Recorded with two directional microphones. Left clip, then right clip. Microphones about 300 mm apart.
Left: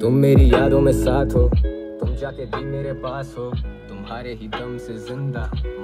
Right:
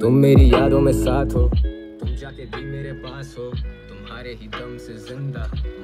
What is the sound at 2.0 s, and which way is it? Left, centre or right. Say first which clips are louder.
Speech: left 7 dB; centre.